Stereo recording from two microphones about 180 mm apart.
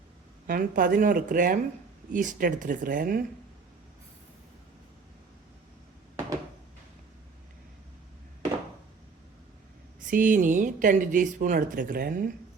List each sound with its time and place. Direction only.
0.4 s speech: 50° right (ahead or behind)
10.1 s speech: 45° right (ahead or behind)